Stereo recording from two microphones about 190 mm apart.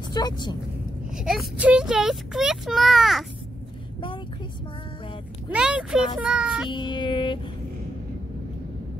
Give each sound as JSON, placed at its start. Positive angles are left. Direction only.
{"t": 0.1, "sound": "speech", "side_deg": 20}
{"t": 1.1, "sound": "speech", "side_deg": 0}
{"t": 5.5, "sound": "speech", "side_deg": -5}
{"t": 6.7, "sound": "music", "side_deg": 25}